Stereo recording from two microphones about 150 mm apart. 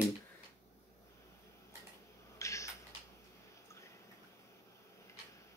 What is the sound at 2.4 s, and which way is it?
Typing, 20° left (ahead or behind).